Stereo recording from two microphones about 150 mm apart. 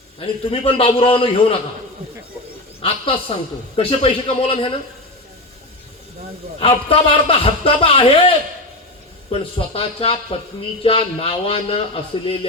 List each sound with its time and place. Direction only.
0.2 s a man's voice: 40° left (ahead or behind)
2.8 s a man's voice: 40° left (ahead or behind)
6.6 s a man's voice: 40° left (ahead or behind)
9.3 s a man's voice: 40° left (ahead or behind)